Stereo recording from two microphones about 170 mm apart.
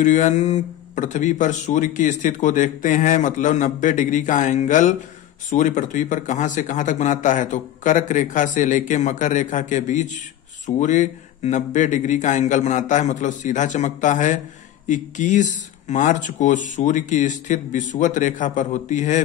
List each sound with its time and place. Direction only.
0.0 s speech: 45° left (ahead or behind)